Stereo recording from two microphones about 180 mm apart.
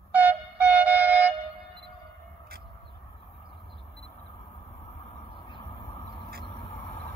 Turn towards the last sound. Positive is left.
turn(degrees=30)  # may be behind; listen again after turning